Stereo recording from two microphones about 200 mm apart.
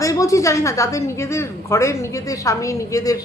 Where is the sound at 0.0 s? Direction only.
15° left (ahead or behind).